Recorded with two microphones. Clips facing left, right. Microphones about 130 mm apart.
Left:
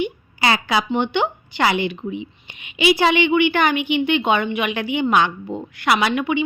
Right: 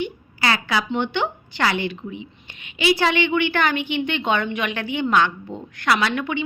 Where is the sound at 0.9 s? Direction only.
15° left (ahead or behind).